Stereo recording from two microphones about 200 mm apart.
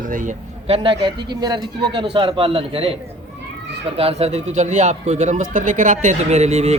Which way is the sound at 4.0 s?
30° right (ahead or behind).